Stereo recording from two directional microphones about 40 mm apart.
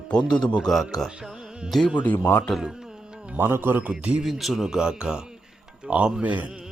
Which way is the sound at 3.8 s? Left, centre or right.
Right.